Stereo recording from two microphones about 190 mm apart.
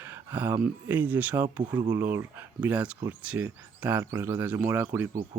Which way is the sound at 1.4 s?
20° right (ahead or behind).